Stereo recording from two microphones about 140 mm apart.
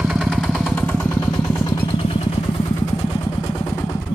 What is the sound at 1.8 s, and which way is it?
Vehicle, 40° left (ahead or behind).